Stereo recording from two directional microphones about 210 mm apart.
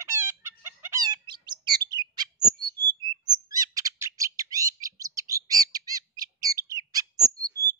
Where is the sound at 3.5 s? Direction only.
15° right (ahead or behind).